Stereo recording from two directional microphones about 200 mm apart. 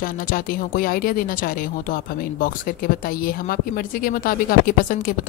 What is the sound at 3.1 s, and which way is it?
Speech, 45° left (ahead or behind).